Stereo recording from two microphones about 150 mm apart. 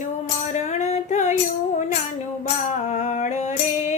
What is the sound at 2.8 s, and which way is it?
Music, 50° left (ahead or behind).